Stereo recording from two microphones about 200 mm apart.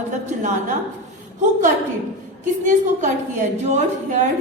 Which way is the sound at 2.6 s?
40° right (ahead or behind).